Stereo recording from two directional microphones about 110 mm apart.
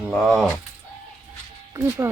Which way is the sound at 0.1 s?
Centre (ahead or behind).